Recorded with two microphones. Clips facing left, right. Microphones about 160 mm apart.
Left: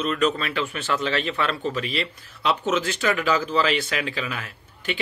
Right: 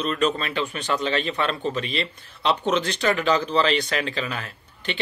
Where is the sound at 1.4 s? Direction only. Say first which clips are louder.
Right 1 dB; 25° right (ahead or behind).